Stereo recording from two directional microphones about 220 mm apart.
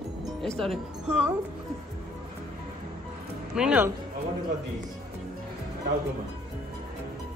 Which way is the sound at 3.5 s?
5° right (ahead or behind).